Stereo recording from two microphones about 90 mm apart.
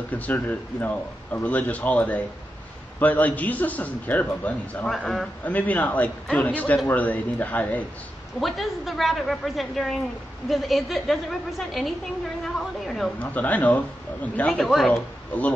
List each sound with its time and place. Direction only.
0.1 s speech: 20° left (ahead or behind)
4.8 s a woman's voice: 5° left (ahead or behind)
5.4 s speech: 20° left (ahead or behind)
8.4 s a woman's voice: centre (ahead or behind)
13.2 s speech: 15° left (ahead or behind)
14.4 s a woman's voice: centre (ahead or behind)
14.9 s speech: 15° left (ahead or behind)